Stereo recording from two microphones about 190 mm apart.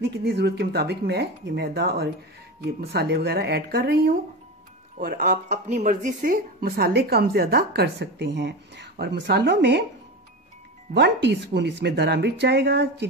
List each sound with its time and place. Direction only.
0.2 s speech: 60° right (ahead or behind)
10.9 s speech: 65° right (ahead or behind)